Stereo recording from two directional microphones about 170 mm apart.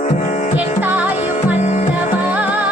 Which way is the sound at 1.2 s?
40° left (ahead or behind).